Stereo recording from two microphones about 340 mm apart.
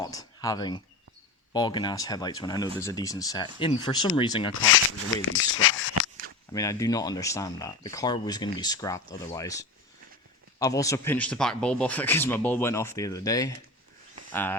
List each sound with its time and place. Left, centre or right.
0.0 s speech: centre
5.3 s speech: left
6.5 s speech: centre